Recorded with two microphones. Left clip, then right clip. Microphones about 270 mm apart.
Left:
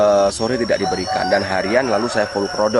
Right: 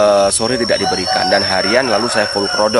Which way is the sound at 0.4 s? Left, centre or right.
Centre.